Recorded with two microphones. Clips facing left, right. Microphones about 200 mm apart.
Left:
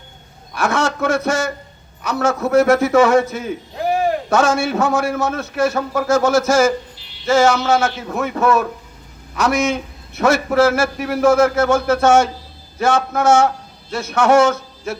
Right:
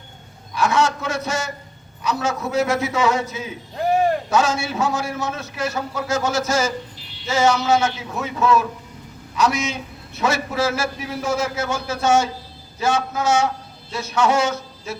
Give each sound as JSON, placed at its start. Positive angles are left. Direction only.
{"t": 0.5, "sound": "a man's voice", "side_deg": 50}